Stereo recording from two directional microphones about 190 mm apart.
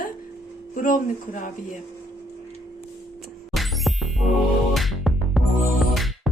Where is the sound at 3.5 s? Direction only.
Centre (ahead or behind).